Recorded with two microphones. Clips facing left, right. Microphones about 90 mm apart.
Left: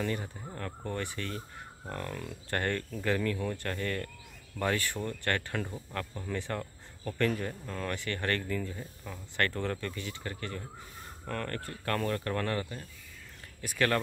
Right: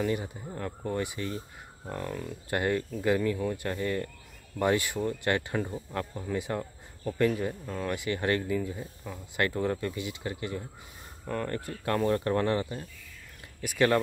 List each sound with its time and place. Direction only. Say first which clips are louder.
0.0 s speech: right 4 dB; 10° right (ahead or behind)